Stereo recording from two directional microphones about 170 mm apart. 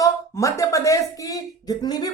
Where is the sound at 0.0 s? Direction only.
20° left (ahead or behind).